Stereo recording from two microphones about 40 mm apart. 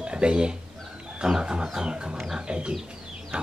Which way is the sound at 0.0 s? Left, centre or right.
Right.